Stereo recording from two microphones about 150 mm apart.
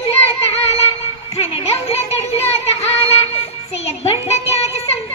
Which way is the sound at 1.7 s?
40° left (ahead or behind).